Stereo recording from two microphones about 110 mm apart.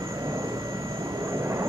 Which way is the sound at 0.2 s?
30° right (ahead or behind).